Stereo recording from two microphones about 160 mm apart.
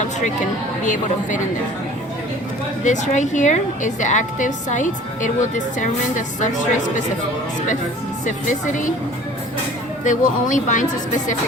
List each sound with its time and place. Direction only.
2.8 s a woman's voice: 50° left (ahead or behind)
8.2 s a woman's voice: 50° left (ahead or behind)
10.0 s a woman's voice: 50° left (ahead or behind)